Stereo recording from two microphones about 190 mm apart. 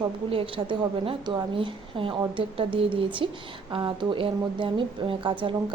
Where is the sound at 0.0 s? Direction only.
30° right (ahead or behind).